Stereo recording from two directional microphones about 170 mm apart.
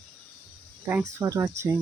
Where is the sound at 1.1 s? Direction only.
20° right (ahead or behind).